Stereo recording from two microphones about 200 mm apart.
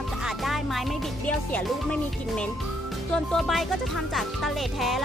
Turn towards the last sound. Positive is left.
turn(degrees=0)  # may be behind; listen again after turning